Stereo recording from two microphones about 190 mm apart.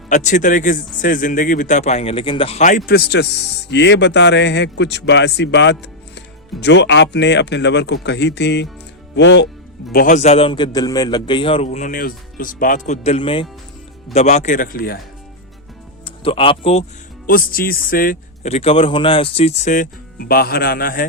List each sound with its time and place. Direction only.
0.1 s a man's voice: 40° left (ahead or behind); by 9.5 s 65° left (ahead or behind)
9.9 s a man's voice: 45° left (ahead or behind)
16.0 s speech: 30° left (ahead or behind)
17.2 s speech: 50° left (ahead or behind)
18.4 s a man's voice: 30° left (ahead or behind); by 21.1 s 50° left (ahead or behind)